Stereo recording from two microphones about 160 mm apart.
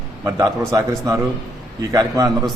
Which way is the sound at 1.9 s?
20° right (ahead or behind).